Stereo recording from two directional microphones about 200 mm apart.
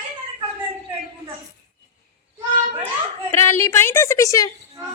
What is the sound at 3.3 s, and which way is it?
A woman's voice, 15° left (ahead or behind).